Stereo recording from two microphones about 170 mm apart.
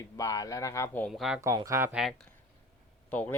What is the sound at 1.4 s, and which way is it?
Speech, 20° right (ahead or behind).